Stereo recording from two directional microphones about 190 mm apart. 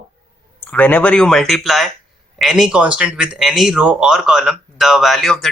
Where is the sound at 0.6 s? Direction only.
5° left (ahead or behind).